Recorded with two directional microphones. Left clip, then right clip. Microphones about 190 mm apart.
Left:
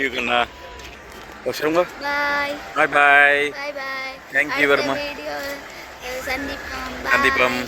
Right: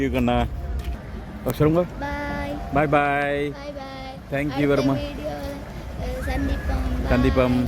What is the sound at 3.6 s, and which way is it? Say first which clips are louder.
Child singing: left 7 dB; 30° left (ahead or behind).